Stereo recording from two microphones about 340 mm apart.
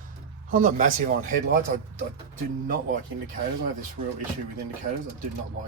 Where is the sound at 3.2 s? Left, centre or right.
Right.